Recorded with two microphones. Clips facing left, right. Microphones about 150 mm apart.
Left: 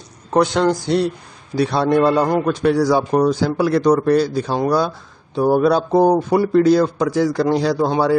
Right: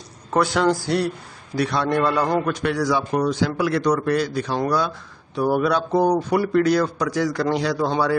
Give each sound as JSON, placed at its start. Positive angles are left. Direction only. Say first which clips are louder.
{"t": 0.3, "sound": "speech", "louder": "left 3 dB", "side_deg": 20}